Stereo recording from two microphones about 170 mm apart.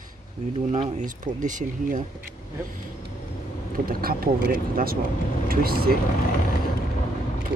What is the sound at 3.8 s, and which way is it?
Speech, 60° right (ahead or behind).